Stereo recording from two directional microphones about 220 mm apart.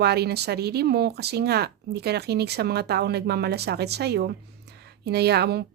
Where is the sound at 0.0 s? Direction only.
45° right (ahead or behind).